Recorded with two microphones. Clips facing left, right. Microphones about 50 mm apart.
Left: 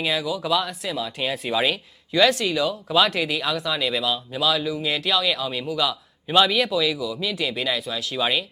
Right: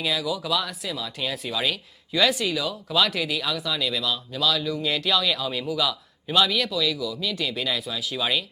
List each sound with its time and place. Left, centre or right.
0.0 s a man's voice: centre
2.4 s a man's voice: centre
5.9 s a man's voice: centre